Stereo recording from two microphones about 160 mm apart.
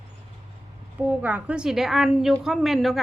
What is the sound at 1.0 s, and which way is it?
A woman's voice, 10° right (ahead or behind).